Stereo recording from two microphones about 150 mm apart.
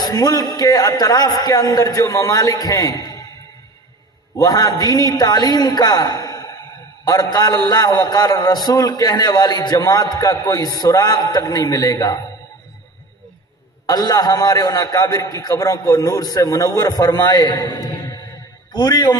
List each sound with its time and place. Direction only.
0.0 s a man's voice: 25° left (ahead or behind)
4.4 s a man's voice: 25° left (ahead or behind)
13.8 s a man's voice: 25° left (ahead or behind)